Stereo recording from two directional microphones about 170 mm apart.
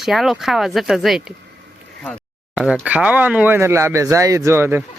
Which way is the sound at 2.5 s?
5° right (ahead or behind).